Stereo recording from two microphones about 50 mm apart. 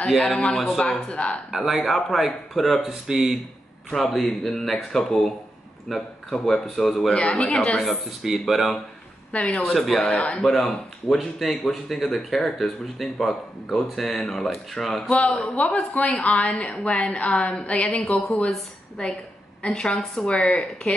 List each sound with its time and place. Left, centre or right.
0.3 s a man's voice: centre
0.8 s a woman's voice: left
1.5 s speech: centre
2.9 s speech: centre
3.9 s a man's voice: centre
7.8 s speech: centre
9.3 s a woman's voice: left
11.1 s speech: centre
15.2 s a man's voice: centre
15.5 s a woman's voice: left